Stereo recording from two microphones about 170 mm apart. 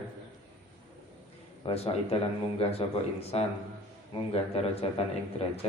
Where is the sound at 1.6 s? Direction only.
30° left (ahead or behind).